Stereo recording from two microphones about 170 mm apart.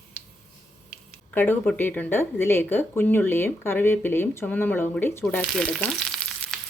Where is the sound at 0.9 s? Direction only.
10° left (ahead or behind).